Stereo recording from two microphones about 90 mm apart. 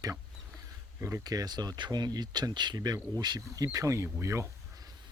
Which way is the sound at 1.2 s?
45° right (ahead or behind).